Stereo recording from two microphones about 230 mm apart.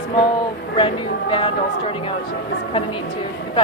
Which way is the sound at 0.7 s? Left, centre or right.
Left.